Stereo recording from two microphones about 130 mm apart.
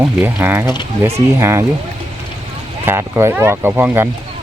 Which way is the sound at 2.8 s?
20° right (ahead or behind).